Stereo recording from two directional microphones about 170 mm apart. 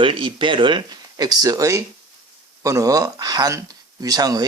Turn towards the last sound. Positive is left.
turn(degrees=-20)  # may be behind; listen again after turning